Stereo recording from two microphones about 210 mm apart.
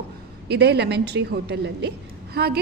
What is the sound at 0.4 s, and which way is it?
A woman's voice, 50° right (ahead or behind).